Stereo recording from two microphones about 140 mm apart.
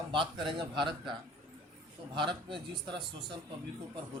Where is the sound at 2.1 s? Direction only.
35° right (ahead or behind).